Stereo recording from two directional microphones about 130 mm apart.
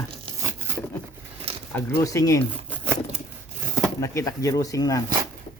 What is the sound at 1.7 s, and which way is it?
Speech, 20° left (ahead or behind).